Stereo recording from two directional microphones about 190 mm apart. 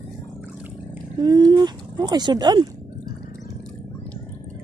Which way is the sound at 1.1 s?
20° right (ahead or behind).